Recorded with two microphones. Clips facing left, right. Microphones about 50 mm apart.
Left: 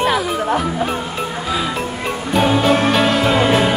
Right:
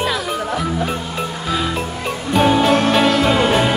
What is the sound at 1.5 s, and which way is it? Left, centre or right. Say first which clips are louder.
Music: right 1 dB; centre.